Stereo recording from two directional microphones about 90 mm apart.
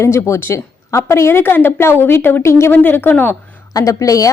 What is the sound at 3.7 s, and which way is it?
Speech, 40° left (ahead or behind).